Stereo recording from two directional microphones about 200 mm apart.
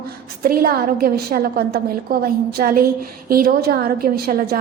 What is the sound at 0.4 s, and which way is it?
A woman's voice, 45° right (ahead or behind).